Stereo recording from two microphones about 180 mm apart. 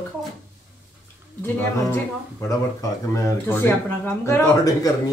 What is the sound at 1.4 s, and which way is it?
Speech, 10° left (ahead or behind).